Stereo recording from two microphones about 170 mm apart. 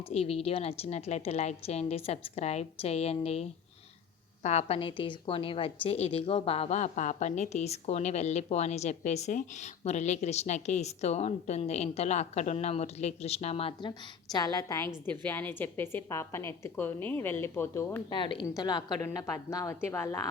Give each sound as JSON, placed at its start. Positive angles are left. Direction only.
{"t": 0.1, "sound": "a woman's voice", "side_deg": 35}
{"t": 4.4, "sound": "a woman's voice", "side_deg": 40}
{"t": 14.3, "sound": "a woman's voice", "side_deg": 20}
{"t": 18.1, "sound": "a woman's voice", "side_deg": 30}